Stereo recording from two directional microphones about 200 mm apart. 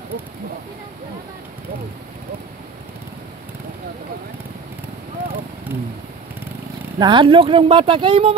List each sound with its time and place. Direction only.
7.0 s speech: 25° right (ahead or behind)